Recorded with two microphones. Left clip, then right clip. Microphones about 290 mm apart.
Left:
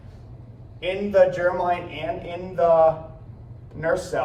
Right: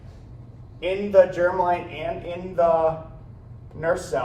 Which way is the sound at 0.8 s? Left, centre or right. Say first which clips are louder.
Right 1 dB; centre.